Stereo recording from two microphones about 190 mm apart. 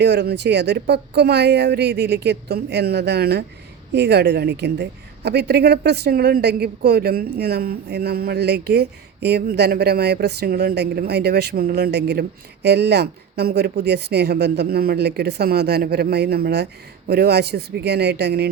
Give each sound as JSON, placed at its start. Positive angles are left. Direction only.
{"t": 0.0, "sound": "speech", "side_deg": -65}